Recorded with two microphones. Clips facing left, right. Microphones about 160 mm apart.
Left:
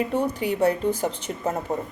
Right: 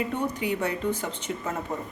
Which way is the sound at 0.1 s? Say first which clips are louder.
Left 4 dB; 35° left (ahead or behind).